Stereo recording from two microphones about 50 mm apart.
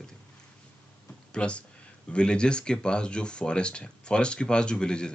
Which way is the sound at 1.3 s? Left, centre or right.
Left.